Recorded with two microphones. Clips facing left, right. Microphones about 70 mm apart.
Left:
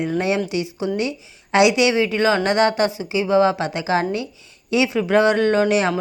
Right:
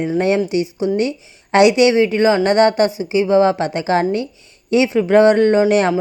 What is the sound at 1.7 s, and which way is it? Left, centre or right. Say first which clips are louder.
A woman's voice: right 5 dB; right.